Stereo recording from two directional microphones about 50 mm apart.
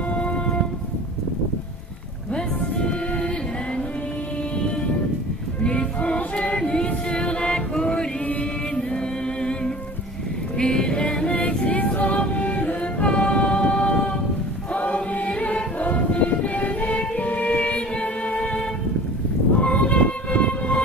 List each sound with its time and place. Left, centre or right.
0.1 s music: left
2.8 s music: centre
5.6 s music: left
10.6 s music: centre
14.7 s choir: left
19.5 s music: left